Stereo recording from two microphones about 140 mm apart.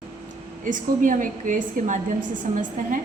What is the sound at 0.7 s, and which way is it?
A woman's voice, 70° right (ahead or behind).